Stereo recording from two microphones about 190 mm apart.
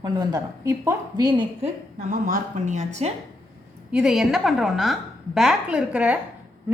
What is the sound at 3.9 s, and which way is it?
A woman's voice, 5° right (ahead or behind).